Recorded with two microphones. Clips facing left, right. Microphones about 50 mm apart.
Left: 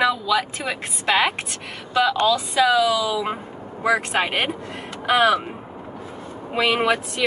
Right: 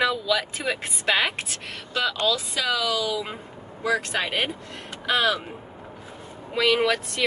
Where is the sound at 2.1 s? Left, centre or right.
Left.